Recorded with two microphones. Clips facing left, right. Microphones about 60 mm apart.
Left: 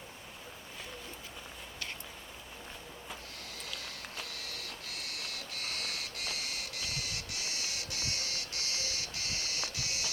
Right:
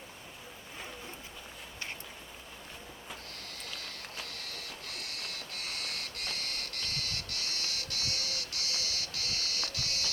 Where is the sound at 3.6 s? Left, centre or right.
Centre.